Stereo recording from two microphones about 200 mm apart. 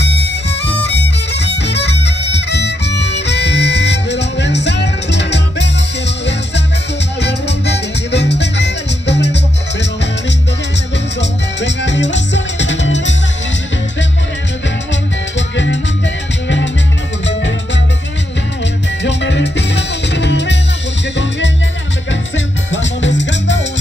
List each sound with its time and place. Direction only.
0.0 s music: 60° left (ahead or behind)
7.2 s music: 60° left (ahead or behind)
11.1 s music: 60° left (ahead or behind)
15.3 s music: 65° left (ahead or behind)
19.0 s music: 65° left (ahead or behind)
22.7 s music: 65° left (ahead or behind)